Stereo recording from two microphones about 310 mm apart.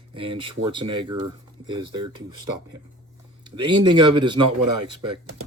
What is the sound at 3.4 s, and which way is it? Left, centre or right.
Speech, centre.